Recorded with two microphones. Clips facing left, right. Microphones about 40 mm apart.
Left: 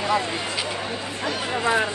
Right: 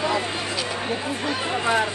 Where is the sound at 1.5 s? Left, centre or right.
Centre.